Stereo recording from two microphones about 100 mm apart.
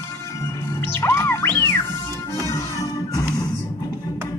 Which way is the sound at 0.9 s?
25° left (ahead or behind).